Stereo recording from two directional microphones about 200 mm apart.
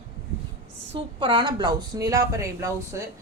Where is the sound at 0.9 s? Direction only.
25° right (ahead or behind).